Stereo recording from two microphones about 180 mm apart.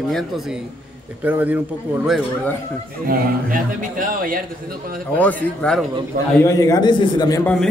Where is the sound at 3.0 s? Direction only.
50° right (ahead or behind).